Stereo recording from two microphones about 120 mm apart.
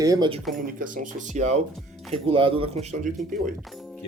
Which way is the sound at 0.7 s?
90° right.